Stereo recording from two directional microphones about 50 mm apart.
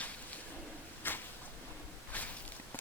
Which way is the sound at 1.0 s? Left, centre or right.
Left.